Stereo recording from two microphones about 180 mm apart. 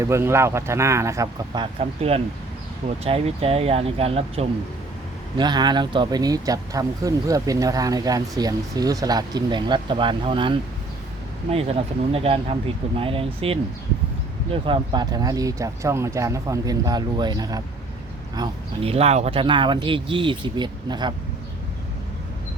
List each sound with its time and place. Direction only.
0.0 s speech: 15° right (ahead or behind); by 4.4 s 35° right (ahead or behind)
5.4 s speech: 25° right (ahead or behind)
18.3 s speech: 30° right (ahead or behind)